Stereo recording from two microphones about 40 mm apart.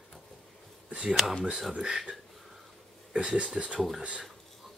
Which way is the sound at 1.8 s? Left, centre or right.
Right.